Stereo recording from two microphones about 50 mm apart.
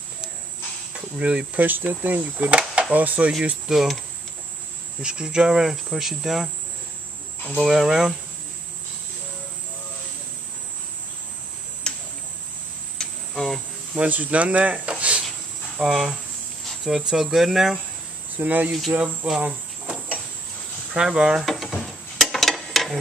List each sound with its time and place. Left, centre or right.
0.9 s speech: centre
1.6 s speech: right
3.6 s speech: centre
5.0 s cricket: centre
7.5 s cricket: centre
11.9 s cricket: centre
13.9 s speech: right
15.8 s speech: centre
16.8 s cricket: centre
18.4 s speech: right
19.4 s cricket: right
20.9 s cricket: centre
21.5 s a sound: centre